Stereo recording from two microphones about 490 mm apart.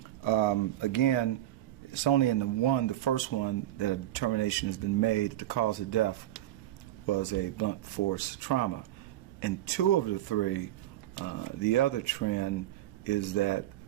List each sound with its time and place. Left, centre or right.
0.2 s speech: left